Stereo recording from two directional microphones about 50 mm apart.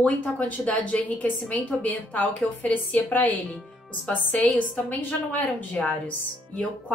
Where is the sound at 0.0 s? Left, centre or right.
Left.